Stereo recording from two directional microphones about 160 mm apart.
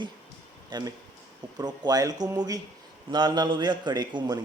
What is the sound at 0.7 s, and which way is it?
A man's voice, 25° right (ahead or behind).